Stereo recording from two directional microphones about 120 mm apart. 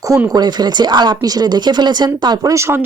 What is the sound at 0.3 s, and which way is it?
A woman's voice, 35° right (ahead or behind).